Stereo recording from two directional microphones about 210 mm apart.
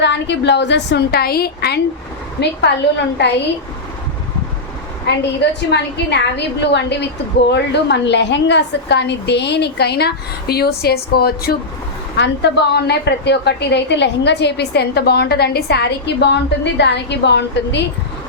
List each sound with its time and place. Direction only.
0.0 s a woman's voice: 55° left (ahead or behind)
5.1 s a woman's voice: 55° left (ahead or behind)